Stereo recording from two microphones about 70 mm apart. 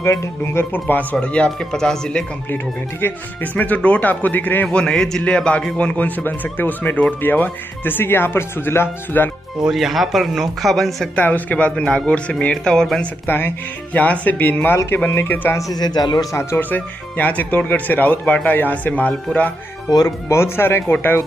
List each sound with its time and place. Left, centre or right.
0.0 s speech: left
0.7 s speech: left
3.5 s speech: left
4.7 s speech: centre
5.9 s speech: left
9.7 s speech: centre
11.1 s speech: left
13.3 s speech: left
15.7 s speech: left
16.3 s speech: left
16.7 s speech: left
20.2 s speech: left